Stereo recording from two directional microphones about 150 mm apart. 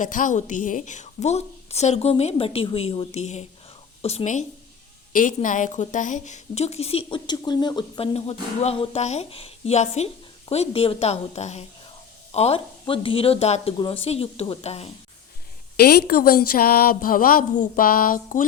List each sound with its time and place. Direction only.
0.0 s a woman's voice: 60° left (ahead or behind)
5.1 s a woman's voice: 60° left (ahead or behind); by 14.8 s 45° left (ahead or behind)
15.8 s a woman's voice: 90° left; by 18.4 s 65° left (ahead or behind)